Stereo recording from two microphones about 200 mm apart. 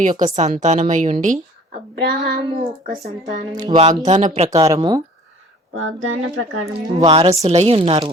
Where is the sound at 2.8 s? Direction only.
40° right (ahead or behind).